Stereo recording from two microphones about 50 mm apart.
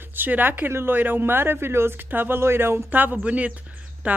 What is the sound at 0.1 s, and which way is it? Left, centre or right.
Speech, right.